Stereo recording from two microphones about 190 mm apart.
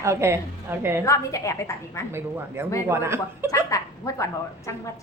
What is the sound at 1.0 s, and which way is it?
A woman's voice, 15° left (ahead or behind).